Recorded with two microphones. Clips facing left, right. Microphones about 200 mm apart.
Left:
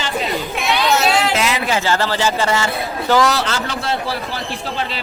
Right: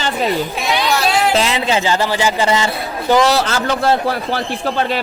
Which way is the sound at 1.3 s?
30° right (ahead or behind).